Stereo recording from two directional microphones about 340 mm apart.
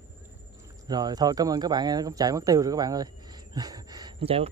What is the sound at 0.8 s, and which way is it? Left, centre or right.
Speech, centre.